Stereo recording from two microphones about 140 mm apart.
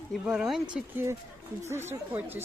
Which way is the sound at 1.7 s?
15° right (ahead or behind).